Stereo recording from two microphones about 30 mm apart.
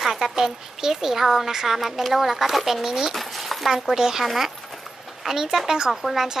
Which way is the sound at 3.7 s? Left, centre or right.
Centre.